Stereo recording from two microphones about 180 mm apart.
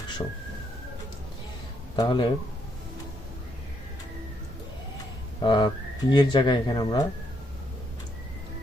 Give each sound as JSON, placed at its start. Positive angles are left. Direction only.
{"t": 2.0, "sound": "speech", "side_deg": 25}
{"t": 5.4, "sound": "speech", "side_deg": 25}